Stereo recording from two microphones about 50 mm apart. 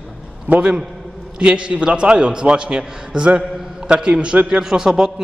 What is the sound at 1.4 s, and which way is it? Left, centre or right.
A man's voice, centre.